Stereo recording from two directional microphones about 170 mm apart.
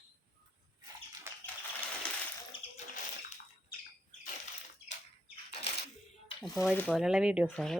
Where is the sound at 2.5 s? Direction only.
30° left (ahead or behind).